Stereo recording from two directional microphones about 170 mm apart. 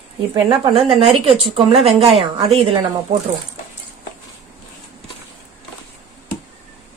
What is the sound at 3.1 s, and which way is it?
Speech, 35° right (ahead or behind).